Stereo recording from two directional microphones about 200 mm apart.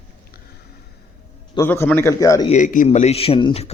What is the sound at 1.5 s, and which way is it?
Speech, 15° left (ahead or behind).